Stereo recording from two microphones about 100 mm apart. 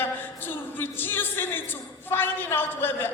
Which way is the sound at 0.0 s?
20° left (ahead or behind).